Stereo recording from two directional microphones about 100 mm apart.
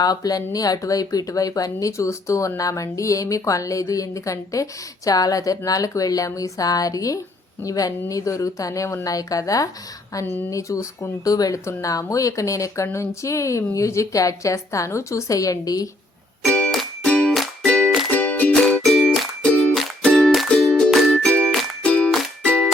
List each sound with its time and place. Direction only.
0.0 s speech: 40° left (ahead or behind)
16.5 s music: 10° left (ahead or behind)
18.5 s music: centre (ahead or behind)